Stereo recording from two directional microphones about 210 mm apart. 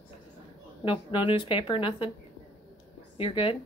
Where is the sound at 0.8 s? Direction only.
25° left (ahead or behind).